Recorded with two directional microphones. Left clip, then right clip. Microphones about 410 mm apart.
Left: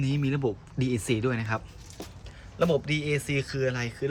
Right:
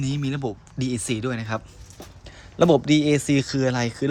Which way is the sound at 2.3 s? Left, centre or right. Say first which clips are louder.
Right 8 dB; centre.